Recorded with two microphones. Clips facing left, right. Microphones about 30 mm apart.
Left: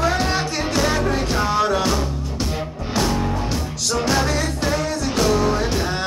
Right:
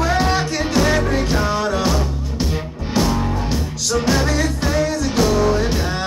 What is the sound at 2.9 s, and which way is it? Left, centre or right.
Music, centre.